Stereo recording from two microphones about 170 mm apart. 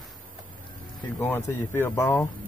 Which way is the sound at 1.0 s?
15° left (ahead or behind).